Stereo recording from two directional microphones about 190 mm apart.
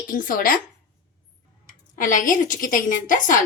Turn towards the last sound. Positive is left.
turn(degrees=45)  # may be behind; listen again after turning